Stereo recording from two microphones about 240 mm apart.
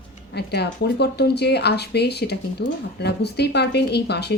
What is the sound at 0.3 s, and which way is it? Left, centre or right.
Speech, left.